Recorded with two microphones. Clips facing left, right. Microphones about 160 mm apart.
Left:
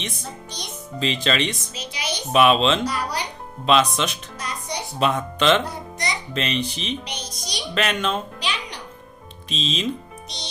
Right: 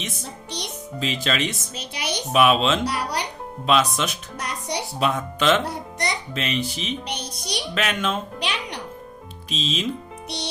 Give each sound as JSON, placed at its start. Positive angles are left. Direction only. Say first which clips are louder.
{"t": 0.9, "sound": "speech", "louder": "left 2 dB", "side_deg": -5}
{"t": 1.7, "sound": "music", "louder": "right 1 dB", "side_deg": -60}
{"t": 2.3, "sound": "speech", "louder": "left 1 dB", "side_deg": -5}
{"t": 2.8, "sound": "speech", "louder": "even", "side_deg": -70}
{"t": 3.7, "sound": "speech", "louder": "left 2 dB", "side_deg": -5}
{"t": 4.4, "sound": "music", "louder": "right 2 dB", "side_deg": -70}
{"t": 4.9, "sound": "speech", "louder": "left 3 dB", "side_deg": -5}
{"t": 5.6, "sound": "music", "louder": "right 2 dB", "side_deg": -60}
{"t": 6.3, "sound": "speech", "louder": "left 1 dB", "side_deg": -5}
{"t": 7.1, "sound": "speech", "louder": "right 3 dB", "side_deg": -60}
{"t": 7.7, "sound": "a child's voice", "louder": "left 3 dB", "side_deg": -5}
{"t": 8.4, "sound": "music", "louder": "right 1 dB", "side_deg": -60}
{"t": 9.5, "sound": "speech", "louder": "left 1 dB", "side_deg": -5}
{"t": 10.2, "sound": "music", "louder": "right 10 dB", "side_deg": -65}